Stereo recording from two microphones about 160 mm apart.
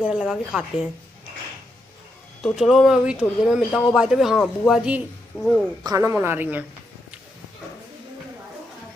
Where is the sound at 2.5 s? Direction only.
Centre (ahead or behind).